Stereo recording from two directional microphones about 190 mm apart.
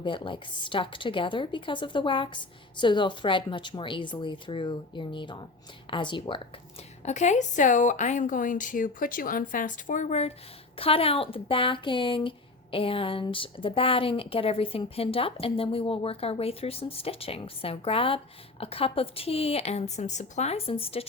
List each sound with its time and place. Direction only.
0.0 s speech: 25° left (ahead or behind)
7.0 s a woman's voice: 40° left (ahead or behind)